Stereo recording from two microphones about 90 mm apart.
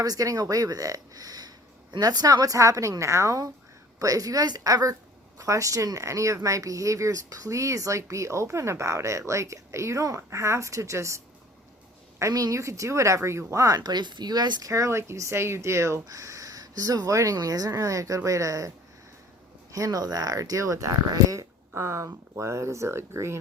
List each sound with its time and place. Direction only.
0.0 s speech: 40° right (ahead or behind)
12.2 s speech: 40° right (ahead or behind)
14.7 s speech: 35° right (ahead or behind)
19.7 s speech: 40° right (ahead or behind)